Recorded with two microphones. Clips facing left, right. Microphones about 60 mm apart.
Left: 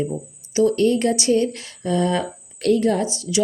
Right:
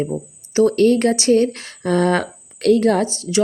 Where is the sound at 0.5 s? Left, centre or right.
Right.